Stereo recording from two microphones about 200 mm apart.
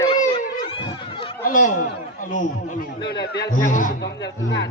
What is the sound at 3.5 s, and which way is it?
Speech, 40° left (ahead or behind).